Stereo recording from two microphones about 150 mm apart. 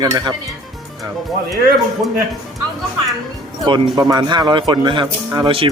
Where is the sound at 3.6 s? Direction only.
25° right (ahead or behind).